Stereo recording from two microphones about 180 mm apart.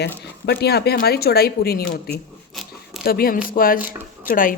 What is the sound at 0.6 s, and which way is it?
Speech, 65° left (ahead or behind).